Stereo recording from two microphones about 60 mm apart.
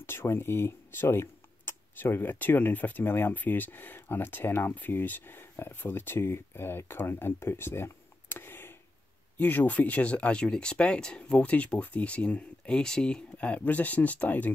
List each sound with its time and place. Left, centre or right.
0.0 s speech: left